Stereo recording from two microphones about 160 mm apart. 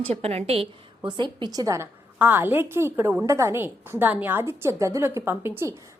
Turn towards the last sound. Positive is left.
turn(degrees=-15)  # may be behind; listen again after turning